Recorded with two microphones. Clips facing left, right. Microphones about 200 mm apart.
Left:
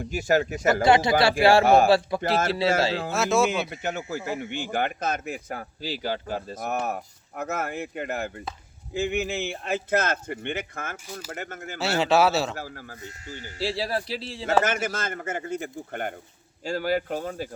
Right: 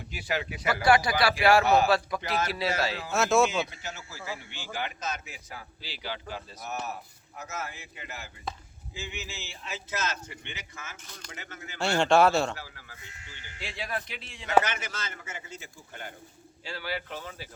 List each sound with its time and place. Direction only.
0.1 s a man's voice: 45° left (ahead or behind)
0.9 s speech: 25° left (ahead or behind)
1.6 s a man's voice: 50° left (ahead or behind)
1.9 s speech: 30° left (ahead or behind)
3.1 s speech: centre (ahead or behind)
3.7 s a man's voice: 60° left (ahead or behind)
11.9 s speech: 5° left (ahead or behind)
12.5 s speech: 45° left (ahead or behind)
14.6 s a man's voice: 50° left (ahead or behind)
16.6 s a man's voice: 45° left (ahead or behind)